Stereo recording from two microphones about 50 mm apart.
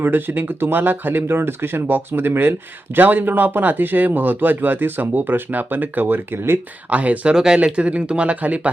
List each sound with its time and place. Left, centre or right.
0.0 s speech: right
6.9 s speech: right
7.3 s speech: centre
7.6 s speech: right